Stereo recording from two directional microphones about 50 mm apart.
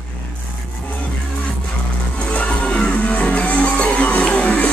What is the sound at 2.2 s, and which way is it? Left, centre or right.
Music, left.